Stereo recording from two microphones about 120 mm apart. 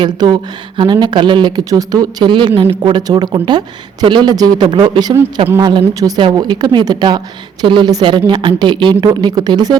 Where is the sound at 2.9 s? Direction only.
35° right (ahead or behind).